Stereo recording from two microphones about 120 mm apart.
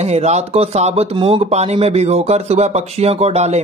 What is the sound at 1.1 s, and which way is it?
Speech, 45° right (ahead or behind).